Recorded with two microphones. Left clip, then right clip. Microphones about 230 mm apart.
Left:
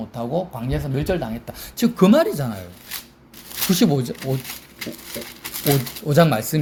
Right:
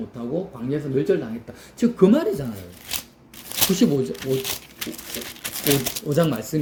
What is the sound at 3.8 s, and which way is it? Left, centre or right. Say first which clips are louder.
Speech: left 3 dB; left.